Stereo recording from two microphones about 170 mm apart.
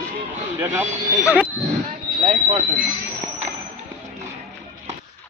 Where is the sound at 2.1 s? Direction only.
30° right (ahead or behind).